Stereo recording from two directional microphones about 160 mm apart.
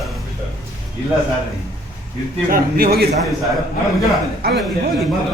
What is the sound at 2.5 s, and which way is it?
Speech, 70° right (ahead or behind).